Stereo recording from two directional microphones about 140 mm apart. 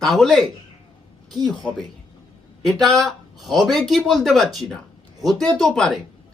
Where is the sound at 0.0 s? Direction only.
Centre (ahead or behind).